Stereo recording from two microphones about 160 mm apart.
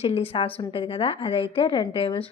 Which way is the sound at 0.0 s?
35° left (ahead or behind).